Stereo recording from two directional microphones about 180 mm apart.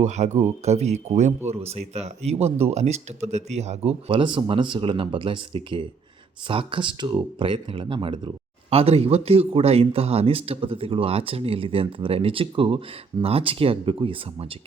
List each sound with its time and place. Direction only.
0.0 s speech: 40° right (ahead or behind)